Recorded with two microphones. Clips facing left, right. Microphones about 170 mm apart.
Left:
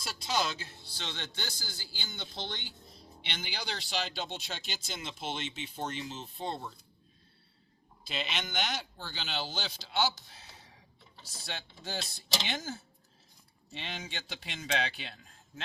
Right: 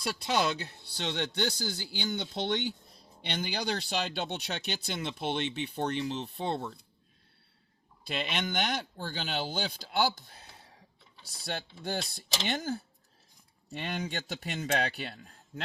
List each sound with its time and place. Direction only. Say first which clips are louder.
0.0 s speech: right 4 dB; 65° right (ahead or behind)
8.0 s a man's voice: right 4 dB; 55° right (ahead or behind)
10.2 s a sound: right 2 dB; 55° right (ahead or behind)
11.5 s a man's voice: right 5 dB; 60° right (ahead or behind)